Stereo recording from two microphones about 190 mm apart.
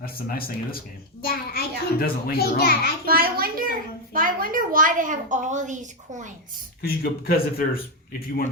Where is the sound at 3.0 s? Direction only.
50° right (ahead or behind).